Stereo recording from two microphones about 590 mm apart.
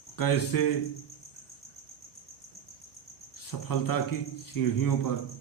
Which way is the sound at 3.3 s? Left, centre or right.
Left.